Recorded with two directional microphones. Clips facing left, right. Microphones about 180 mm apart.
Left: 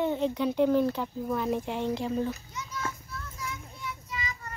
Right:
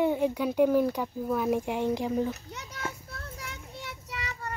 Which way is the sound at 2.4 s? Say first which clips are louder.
Left 3 dB; 65° right (ahead or behind).